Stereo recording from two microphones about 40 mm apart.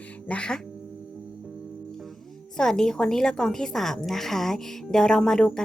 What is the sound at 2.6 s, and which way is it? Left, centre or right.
Speech, centre.